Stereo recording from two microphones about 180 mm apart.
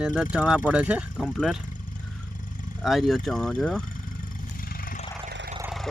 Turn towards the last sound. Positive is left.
turn(degrees=0)  # may be behind; listen again after turning